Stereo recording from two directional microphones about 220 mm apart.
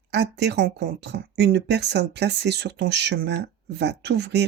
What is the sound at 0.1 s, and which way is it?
Speech, 50° right (ahead or behind).